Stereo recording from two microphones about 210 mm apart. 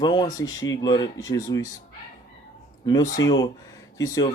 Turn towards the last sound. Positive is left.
turn(degrees=15)  # may be behind; listen again after turning